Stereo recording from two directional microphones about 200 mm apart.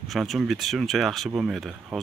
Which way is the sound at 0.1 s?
Centre (ahead or behind).